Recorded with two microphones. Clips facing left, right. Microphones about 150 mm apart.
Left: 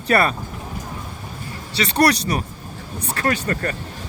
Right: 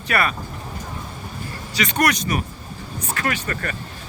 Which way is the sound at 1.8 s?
35° left (ahead or behind).